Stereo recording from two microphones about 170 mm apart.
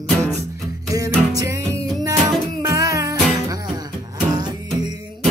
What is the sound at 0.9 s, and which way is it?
Music, 20° right (ahead or behind).